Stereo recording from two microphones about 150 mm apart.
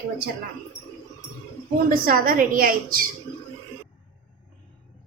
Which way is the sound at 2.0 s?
70° right (ahead or behind).